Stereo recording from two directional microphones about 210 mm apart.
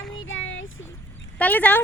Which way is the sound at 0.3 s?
65° left (ahead or behind).